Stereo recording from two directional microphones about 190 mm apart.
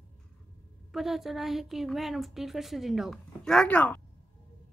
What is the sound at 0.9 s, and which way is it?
Speech, centre (ahead or behind).